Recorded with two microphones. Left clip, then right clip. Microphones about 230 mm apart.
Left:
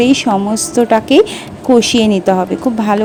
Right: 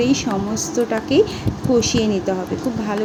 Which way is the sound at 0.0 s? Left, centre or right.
Left.